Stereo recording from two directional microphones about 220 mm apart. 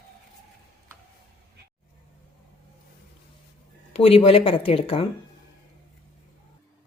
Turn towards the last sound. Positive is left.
turn(degrees=25)  # may be behind; listen again after turning